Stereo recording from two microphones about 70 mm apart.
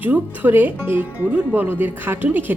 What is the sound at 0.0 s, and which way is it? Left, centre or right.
Speech, right.